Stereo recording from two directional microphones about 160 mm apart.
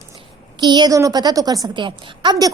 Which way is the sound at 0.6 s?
25° right (ahead or behind).